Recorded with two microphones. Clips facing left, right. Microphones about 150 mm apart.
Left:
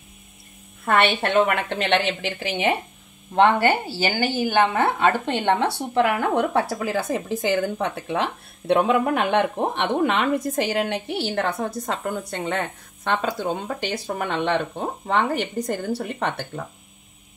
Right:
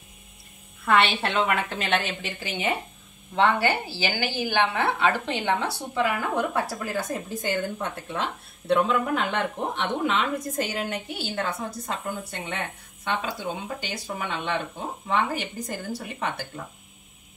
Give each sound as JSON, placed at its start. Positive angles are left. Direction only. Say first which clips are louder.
{"t": 0.8, "sound": "a woman's voice", "louder": "left 2 dB", "side_deg": 50}
{"t": 3.3, "sound": "a woman's voice", "louder": "left 5 dB", "side_deg": 55}
{"t": 4.2, "sound": "a woman's voice", "louder": "left 5 dB", "side_deg": 40}
{"t": 5.6, "sound": "speech", "louder": "left 6 dB", "side_deg": 70}
{"t": 13.1, "sound": "a woman's voice", "louder": "left 5 dB", "side_deg": 50}